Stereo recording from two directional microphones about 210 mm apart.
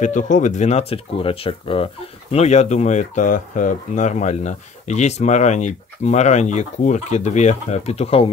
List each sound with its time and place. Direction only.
0.0 s speech: 35° left (ahead or behind)